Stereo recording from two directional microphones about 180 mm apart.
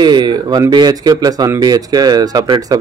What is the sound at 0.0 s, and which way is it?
Speech, 25° right (ahead or behind).